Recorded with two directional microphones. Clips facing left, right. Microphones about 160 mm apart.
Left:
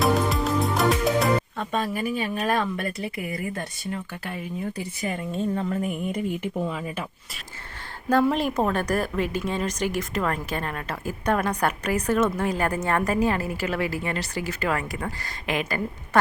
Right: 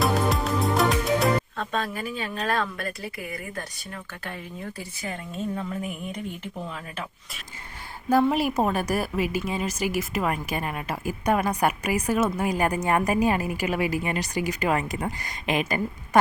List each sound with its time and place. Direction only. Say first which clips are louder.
0.0 s music: left 1 dB; centre (ahead or behind)
1.5 s speech: left 2 dB; 10° left (ahead or behind); by 4.0 s 25° left (ahead or behind)
6.1 s speech: left 6 dB; 5° left (ahead or behind)
8.1 s speech: even; 10° right (ahead or behind)